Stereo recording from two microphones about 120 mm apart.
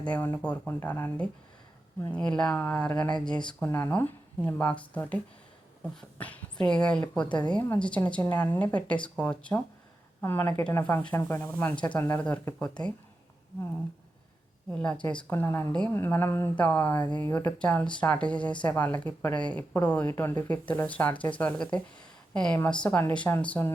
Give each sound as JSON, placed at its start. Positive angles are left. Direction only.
{"t": 0.0, "sound": "speech", "side_deg": 15}
{"t": 2.2, "sound": "speech", "side_deg": 10}
{"t": 3.7, "sound": "speech", "side_deg": 20}
{"t": 14.7, "sound": "speech", "side_deg": 10}
{"t": 16.0, "sound": "a woman's voice", "side_deg": 20}